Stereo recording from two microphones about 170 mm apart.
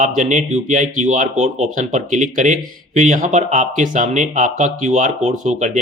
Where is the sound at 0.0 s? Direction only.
45° right (ahead or behind).